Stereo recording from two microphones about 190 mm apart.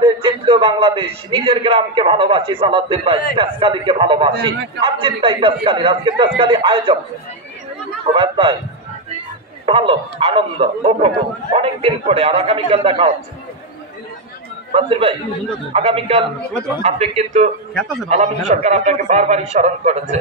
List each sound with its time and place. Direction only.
0.0 s a man's voice: 25° right (ahead or behind)
8.0 s a man's voice: 30° right (ahead or behind)
9.7 s a man's voice: 30° right (ahead or behind)
14.7 s a man's voice: 30° right (ahead or behind)